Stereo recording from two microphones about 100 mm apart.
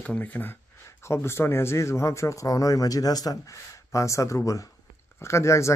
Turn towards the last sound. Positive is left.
turn(degrees=30)  # may be behind; listen again after turning